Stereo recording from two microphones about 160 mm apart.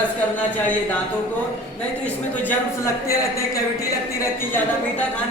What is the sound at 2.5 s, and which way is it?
A woman's voice, 20° left (ahead or behind).